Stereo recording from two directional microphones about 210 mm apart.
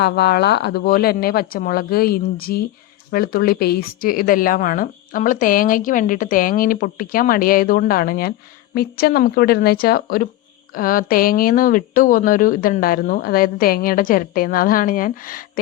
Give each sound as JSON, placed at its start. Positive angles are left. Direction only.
{"t": 0.0, "sound": "a woman's voice", "side_deg": 50}